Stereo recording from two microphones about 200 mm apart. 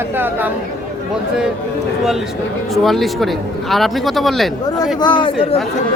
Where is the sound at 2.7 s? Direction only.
Centre (ahead or behind).